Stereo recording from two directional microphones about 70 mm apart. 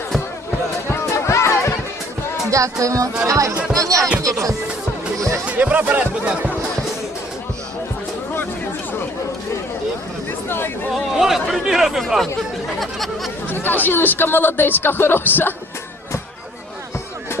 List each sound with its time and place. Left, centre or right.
1.3 s music: left
2.5 s speech: right
5.5 s speech: right
10.9 s speech: centre
12.8 s a sound: centre
13.5 s speech: left